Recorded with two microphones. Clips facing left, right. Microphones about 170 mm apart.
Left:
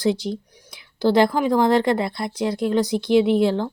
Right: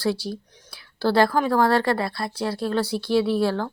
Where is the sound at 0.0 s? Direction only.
20° left (ahead or behind).